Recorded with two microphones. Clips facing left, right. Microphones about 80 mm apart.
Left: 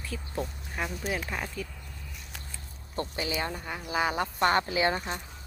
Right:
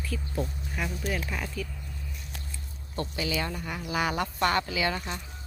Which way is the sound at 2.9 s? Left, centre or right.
Left.